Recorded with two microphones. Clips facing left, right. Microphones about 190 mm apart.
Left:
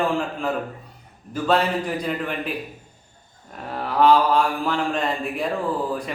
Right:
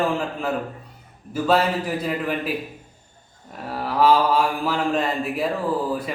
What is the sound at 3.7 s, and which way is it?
Mantra, 5° right (ahead or behind).